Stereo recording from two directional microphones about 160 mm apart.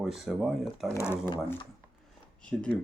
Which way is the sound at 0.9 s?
15° left (ahead or behind).